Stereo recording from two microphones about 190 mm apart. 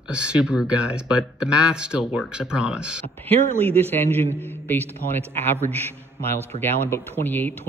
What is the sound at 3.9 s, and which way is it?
Speech, 10° left (ahead or behind).